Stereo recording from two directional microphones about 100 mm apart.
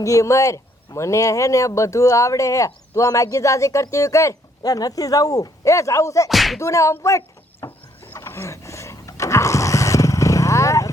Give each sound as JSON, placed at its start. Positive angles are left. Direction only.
{"t": 0.0, "sound": "speech", "side_deg": 35}
{"t": 6.2, "sound": "whip", "side_deg": 0}
{"t": 6.6, "sound": "speech", "side_deg": 30}
{"t": 8.0, "sound": "a sound", "side_deg": 25}